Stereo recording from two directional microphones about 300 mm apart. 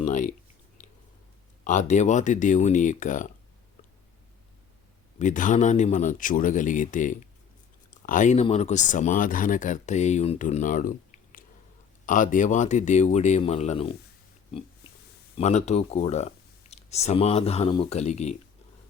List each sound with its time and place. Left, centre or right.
0.0 s a sound: left
1.6 s speech: left
5.2 s speech: left
15.4 s speech: left